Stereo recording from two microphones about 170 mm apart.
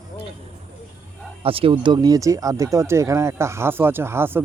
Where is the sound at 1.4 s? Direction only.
35° right (ahead or behind).